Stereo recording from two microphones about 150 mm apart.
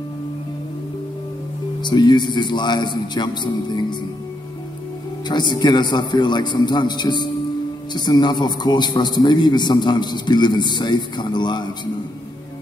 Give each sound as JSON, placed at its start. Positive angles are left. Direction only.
{"t": 1.8, "sound": "a man's voice", "side_deg": 30}
{"t": 5.3, "sound": "a man's voice", "side_deg": 30}